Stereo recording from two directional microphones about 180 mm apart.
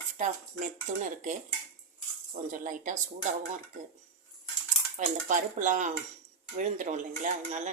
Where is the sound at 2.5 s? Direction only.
45° right (ahead or behind).